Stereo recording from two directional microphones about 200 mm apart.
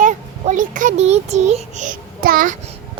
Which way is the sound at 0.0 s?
40° right (ahead or behind).